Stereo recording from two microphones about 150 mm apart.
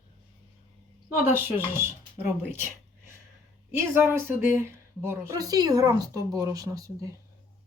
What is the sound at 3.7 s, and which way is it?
A woman's voice, 15° right (ahead or behind).